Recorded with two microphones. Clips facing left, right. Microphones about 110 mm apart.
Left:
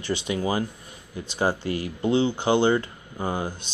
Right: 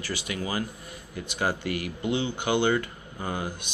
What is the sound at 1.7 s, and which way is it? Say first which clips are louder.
Speech: left 5 dB; 35° left (ahead or behind).